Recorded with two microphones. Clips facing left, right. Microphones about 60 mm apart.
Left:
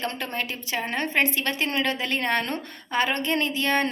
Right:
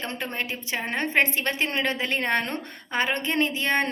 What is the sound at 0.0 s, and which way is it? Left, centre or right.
A woman's voice, right.